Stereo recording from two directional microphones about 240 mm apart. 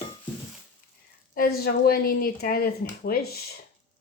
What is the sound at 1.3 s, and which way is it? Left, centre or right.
Speech, left.